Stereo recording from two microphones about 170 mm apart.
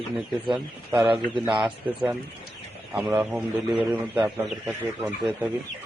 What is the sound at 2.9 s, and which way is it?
Speech, 10° right (ahead or behind).